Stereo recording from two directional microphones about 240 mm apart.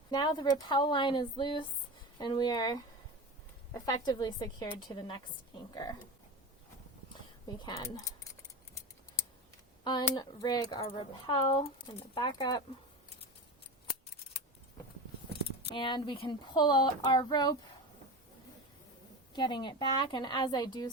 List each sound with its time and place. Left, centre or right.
0.1 s speech: centre
7.1 s a sound: centre
9.8 s speech: centre
15.6 s speech: centre
19.3 s speech: centre